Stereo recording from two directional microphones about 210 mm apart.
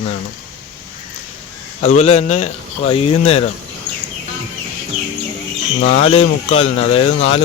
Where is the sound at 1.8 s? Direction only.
30° left (ahead or behind).